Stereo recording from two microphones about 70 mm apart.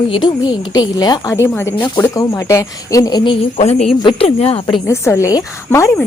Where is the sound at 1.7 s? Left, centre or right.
Left.